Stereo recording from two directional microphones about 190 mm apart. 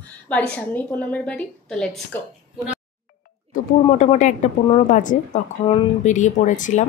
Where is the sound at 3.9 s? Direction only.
35° left (ahead or behind).